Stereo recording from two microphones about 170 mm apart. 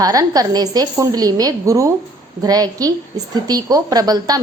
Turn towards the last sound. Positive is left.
turn(degrees=-20)  # may be behind; listen again after turning